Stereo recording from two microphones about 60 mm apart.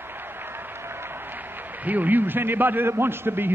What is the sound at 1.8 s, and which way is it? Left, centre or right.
A man's voice, right.